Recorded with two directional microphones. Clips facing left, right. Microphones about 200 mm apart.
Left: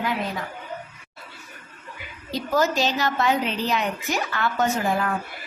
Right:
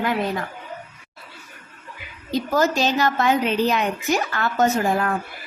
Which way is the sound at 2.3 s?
45° right (ahead or behind).